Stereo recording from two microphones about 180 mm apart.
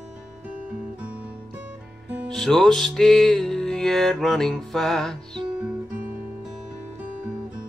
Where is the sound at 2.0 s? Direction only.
5° right (ahead or behind).